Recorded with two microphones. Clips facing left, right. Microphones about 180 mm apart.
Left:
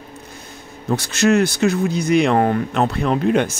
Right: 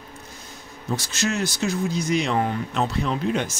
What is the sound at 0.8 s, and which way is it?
Speech, 60° left (ahead or behind).